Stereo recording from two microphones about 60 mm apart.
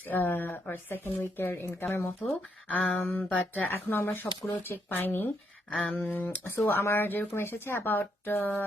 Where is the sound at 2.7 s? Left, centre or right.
Left.